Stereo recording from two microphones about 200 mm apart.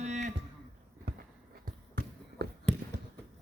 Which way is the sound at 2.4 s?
55° right (ahead or behind).